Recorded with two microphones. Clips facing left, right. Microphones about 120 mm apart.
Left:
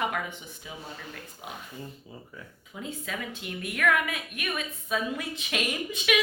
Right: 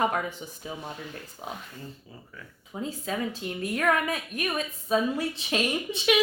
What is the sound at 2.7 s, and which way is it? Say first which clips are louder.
A woman's voice: right 5 dB; 35° right (ahead or behind).